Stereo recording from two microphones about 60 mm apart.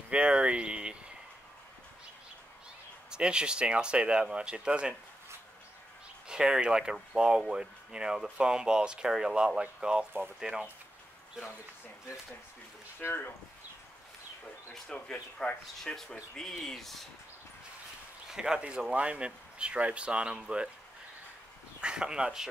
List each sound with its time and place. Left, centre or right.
0.1 s speech: centre
3.1 s speech: centre
6.2 s speech: centre
13.0 s speech: left
14.9 s speech: centre
18.3 s speech: centre
21.8 s speech: centre